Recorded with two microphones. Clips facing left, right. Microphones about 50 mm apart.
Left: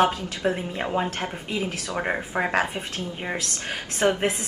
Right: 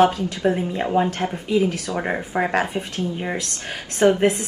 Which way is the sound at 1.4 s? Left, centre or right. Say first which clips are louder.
Right 8 dB; left.